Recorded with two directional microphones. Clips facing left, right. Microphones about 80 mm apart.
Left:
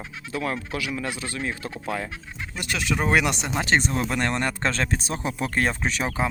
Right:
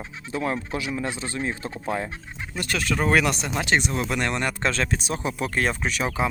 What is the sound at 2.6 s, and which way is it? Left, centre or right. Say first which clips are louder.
Speech: right 1 dB; centre.